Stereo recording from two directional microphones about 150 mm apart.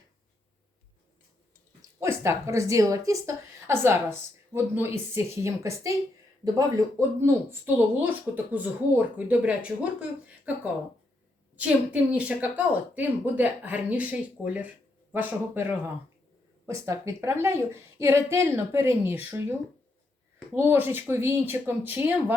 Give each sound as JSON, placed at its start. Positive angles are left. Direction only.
{"t": 1.8, "sound": "a woman's voice", "side_deg": -20}